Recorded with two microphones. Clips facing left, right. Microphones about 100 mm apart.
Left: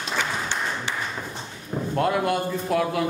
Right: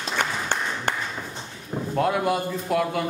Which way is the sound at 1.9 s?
Centre (ahead or behind).